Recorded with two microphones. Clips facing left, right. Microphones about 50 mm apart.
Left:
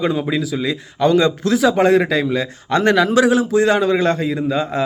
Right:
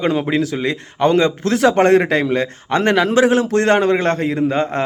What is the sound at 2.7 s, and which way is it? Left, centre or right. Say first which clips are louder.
Speech: left 1 dB; right.